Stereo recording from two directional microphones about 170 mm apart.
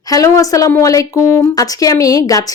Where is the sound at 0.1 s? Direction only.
20° left (ahead or behind).